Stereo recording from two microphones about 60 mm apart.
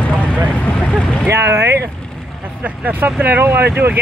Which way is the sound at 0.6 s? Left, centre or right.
Centre.